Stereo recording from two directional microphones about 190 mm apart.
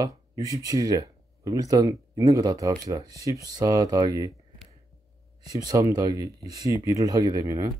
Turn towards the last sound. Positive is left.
turn(degrees=-20)  # may be behind; listen again after turning